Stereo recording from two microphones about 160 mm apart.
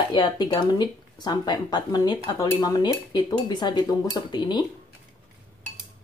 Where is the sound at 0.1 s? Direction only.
25° left (ahead or behind).